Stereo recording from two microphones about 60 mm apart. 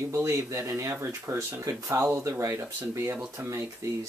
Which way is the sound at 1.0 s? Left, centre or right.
Right.